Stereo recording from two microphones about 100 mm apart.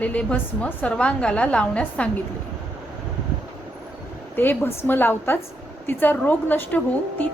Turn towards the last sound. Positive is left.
turn(degrees=20)  # may be behind; listen again after turning